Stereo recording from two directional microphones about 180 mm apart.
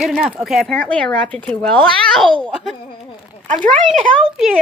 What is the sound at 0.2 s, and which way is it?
Speech, 5° right (ahead or behind).